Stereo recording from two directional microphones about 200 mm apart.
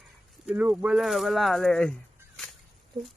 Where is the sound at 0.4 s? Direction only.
5° right (ahead or behind).